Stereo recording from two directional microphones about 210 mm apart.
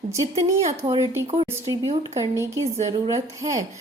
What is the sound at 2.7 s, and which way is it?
Speech, 30° right (ahead or behind).